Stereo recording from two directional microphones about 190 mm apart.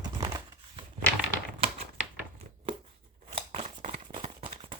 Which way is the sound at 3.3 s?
30° right (ahead or behind).